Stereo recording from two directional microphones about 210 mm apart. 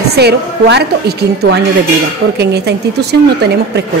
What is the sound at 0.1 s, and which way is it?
A woman's voice, 50° right (ahead or behind).